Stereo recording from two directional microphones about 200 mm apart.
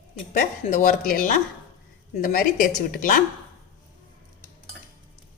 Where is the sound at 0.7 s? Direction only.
40° left (ahead or behind).